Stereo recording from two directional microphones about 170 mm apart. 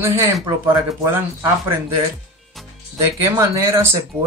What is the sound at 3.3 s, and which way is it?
Speech, 15° right (ahead or behind).